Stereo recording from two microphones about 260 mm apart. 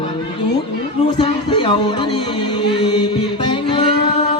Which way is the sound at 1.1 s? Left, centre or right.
Centre.